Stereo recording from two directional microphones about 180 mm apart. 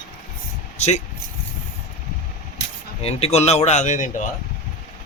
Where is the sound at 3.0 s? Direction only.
35° left (ahead or behind).